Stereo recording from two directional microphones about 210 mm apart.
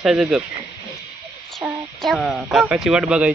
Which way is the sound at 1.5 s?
Centre (ahead or behind).